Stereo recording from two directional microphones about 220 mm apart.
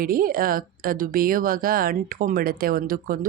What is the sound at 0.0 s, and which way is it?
Speech, 40° right (ahead or behind).